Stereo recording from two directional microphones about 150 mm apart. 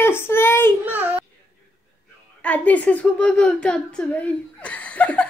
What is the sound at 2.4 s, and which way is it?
A child's voice, 10° left (ahead or behind).